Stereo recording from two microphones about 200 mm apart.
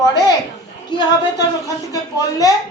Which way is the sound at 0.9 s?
20° left (ahead or behind).